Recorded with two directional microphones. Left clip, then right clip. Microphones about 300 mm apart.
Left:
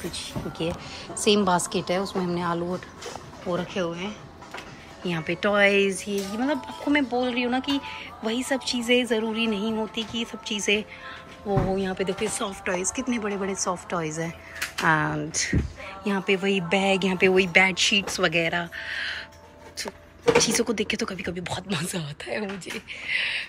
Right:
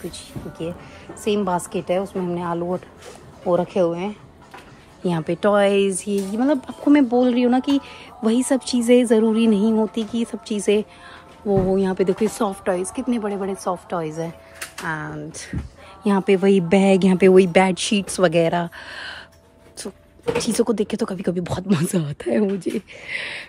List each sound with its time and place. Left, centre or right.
0.1 s a woman's voice: centre
16.0 s speech: centre